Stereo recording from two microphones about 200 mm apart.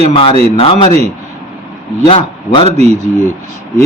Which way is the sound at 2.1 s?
25° left (ahead or behind).